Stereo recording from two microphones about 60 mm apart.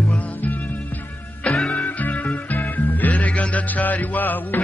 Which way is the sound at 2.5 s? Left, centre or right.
Left.